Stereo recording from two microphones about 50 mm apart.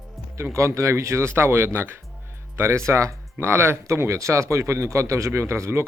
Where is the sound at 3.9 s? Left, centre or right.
Right.